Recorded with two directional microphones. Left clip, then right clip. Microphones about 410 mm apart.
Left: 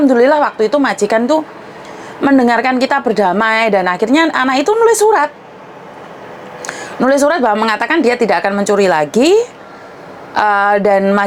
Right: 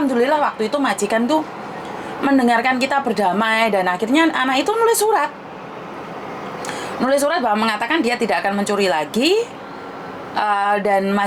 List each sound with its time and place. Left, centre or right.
0.1 s a woman's voice: left
7.0 s a woman's voice: left